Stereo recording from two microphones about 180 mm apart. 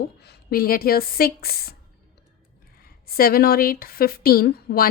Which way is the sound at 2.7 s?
55° left (ahead or behind).